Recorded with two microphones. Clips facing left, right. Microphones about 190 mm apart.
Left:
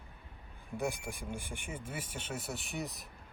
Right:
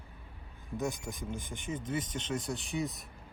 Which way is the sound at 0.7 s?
10° left (ahead or behind).